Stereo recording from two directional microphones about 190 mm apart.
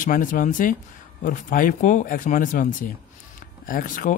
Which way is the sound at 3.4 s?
45° left (ahead or behind).